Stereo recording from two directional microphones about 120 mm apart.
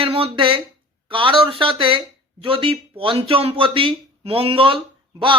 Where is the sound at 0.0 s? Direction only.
45° right (ahead or behind).